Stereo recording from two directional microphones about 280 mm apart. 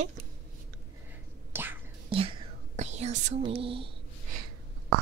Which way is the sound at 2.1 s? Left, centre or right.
Centre.